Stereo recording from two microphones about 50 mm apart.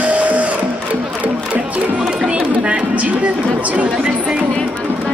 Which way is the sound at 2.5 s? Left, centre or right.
Right.